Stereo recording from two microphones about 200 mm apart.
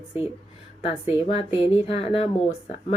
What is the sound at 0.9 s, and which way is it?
Speech, 25° left (ahead or behind).